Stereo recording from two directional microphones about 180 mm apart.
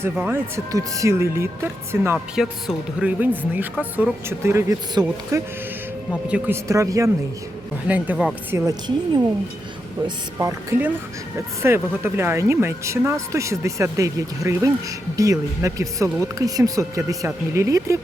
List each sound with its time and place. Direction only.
0.0 s speech: 10° right (ahead or behind)
2.1 s speech: centre (ahead or behind)
6.2 s speech: 5° right (ahead or behind)
6.7 s speech: 15° right (ahead or behind)
10.3 s speech: 15° right (ahead or behind)